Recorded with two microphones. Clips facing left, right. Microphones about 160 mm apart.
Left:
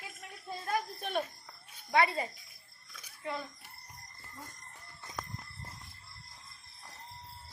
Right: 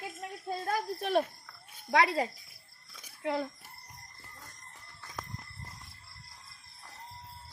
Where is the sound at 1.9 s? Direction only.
85° right.